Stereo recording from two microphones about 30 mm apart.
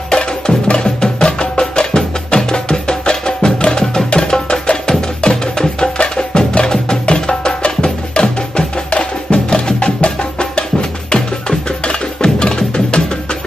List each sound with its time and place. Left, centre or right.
0.1 s music: left